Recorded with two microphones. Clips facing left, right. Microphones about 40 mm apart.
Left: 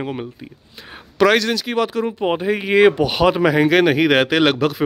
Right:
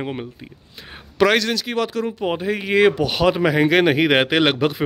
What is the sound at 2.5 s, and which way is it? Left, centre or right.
Speech, centre.